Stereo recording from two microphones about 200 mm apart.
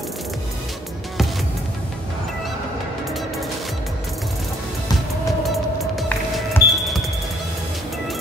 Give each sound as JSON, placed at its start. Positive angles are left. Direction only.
{"t": 5.4, "sound": "music", "side_deg": 0}